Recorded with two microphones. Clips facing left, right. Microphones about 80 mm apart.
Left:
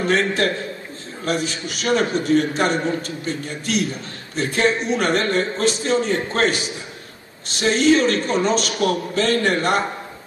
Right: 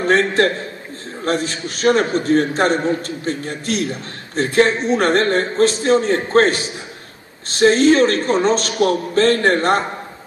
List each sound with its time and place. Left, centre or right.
0.0 s a man's voice: right